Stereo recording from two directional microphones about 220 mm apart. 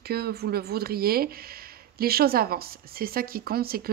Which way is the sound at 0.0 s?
45° right (ahead or behind).